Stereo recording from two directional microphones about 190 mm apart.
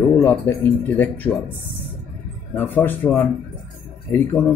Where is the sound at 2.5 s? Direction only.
10° left (ahead or behind).